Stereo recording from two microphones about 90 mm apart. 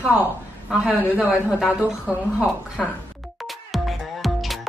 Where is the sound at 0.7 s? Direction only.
20° right (ahead or behind).